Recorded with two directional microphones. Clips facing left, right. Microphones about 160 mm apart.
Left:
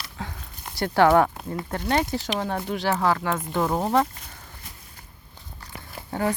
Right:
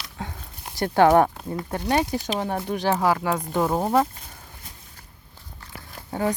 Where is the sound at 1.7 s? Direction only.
15° right (ahead or behind).